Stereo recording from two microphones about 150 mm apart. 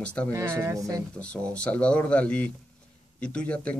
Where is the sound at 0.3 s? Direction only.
20° right (ahead or behind).